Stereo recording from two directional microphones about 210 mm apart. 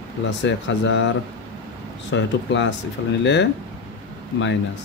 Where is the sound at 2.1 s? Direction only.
60° left (ahead or behind).